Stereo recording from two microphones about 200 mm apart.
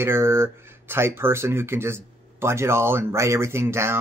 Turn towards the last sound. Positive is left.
turn(degrees=-15)  # may be behind; listen again after turning